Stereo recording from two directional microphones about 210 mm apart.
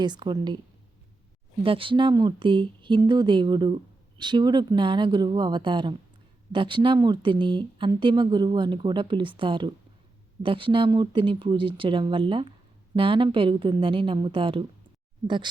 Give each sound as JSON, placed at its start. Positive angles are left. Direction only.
{"t": 0.0, "sound": "speech", "side_deg": -20}
{"t": 1.6, "sound": "speech", "side_deg": -25}